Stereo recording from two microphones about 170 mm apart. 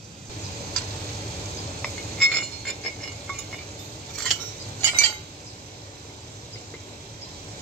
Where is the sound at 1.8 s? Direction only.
5° left (ahead or behind).